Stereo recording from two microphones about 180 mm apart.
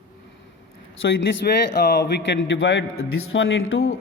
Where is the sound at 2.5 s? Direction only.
75° left (ahead or behind).